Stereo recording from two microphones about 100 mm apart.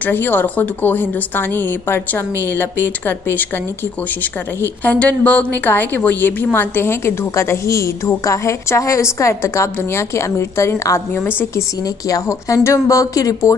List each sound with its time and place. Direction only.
0.0 s a woman's voice: 20° left (ahead or behind)
12.1 s speech: 35° left (ahead or behind)